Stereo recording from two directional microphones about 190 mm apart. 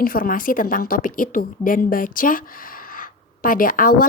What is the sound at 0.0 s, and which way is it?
A woman's voice, 50° left (ahead or behind).